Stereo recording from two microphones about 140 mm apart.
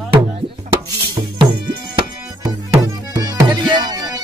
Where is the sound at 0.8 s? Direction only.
30° right (ahead or behind).